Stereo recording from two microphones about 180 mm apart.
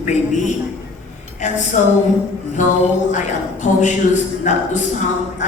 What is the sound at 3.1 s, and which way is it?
Speech, 45° left (ahead or behind).